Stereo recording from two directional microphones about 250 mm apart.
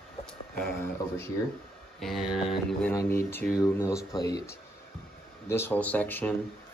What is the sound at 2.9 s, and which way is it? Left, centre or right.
Speech, centre.